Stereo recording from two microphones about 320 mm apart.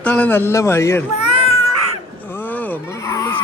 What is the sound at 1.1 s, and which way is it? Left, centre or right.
Cat, centre.